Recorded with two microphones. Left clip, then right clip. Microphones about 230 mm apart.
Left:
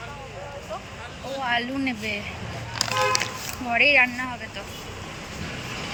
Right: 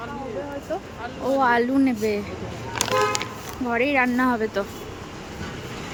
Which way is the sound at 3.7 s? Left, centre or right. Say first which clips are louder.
Left 3 dB; centre.